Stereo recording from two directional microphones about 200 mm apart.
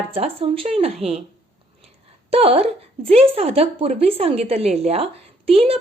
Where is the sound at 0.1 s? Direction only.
30° right (ahead or behind).